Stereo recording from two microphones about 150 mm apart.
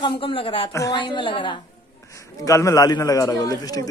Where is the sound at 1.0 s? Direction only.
35° left (ahead or behind).